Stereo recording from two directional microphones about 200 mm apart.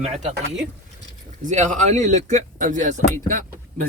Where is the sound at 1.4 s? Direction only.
40° right (ahead or behind).